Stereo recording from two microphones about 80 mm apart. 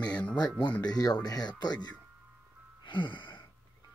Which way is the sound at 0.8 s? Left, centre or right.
Left.